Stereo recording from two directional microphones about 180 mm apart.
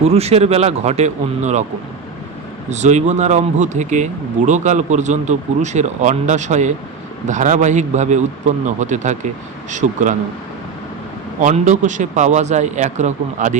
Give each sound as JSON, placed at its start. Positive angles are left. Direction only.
{"t": 0.0, "sound": "speech", "side_deg": -35}
{"t": 2.6, "sound": "a man's voice", "side_deg": -40}
{"t": 11.3, "sound": "speech", "side_deg": -45}